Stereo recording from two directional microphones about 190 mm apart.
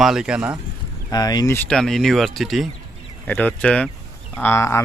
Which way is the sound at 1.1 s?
20° left (ahead or behind).